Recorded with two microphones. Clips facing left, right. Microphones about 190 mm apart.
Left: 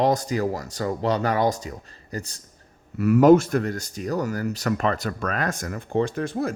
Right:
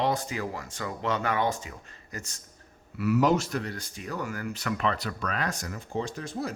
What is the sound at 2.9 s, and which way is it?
Speech, 50° left (ahead or behind).